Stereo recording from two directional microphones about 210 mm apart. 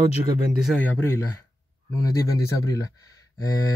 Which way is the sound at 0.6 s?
10° left (ahead or behind).